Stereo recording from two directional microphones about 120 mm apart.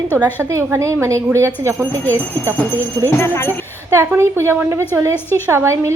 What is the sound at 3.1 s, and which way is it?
Speech, 20° left (ahead or behind).